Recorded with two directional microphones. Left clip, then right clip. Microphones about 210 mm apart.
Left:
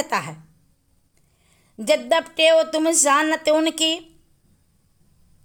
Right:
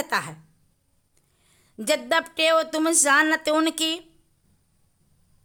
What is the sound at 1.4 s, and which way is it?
Speech, 5° right (ahead or behind).